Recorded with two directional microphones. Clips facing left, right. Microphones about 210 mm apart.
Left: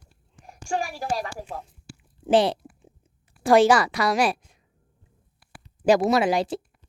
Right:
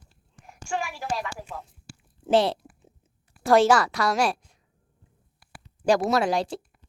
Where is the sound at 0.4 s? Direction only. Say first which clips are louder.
Left 3 dB; 35° left (ahead or behind).